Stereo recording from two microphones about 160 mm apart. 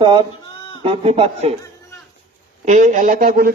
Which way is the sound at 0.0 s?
30° right (ahead or behind).